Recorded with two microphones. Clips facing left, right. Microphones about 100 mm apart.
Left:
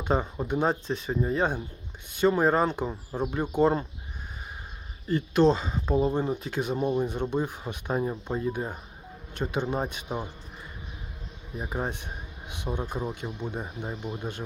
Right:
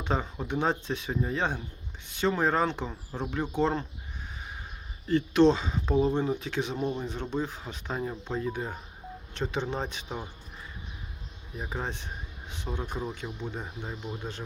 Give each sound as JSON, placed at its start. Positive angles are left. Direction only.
{"t": 0.0, "sound": "speech", "side_deg": 10}
{"t": 5.0, "sound": "speech", "side_deg": 10}
{"t": 11.6, "sound": "speech", "side_deg": 15}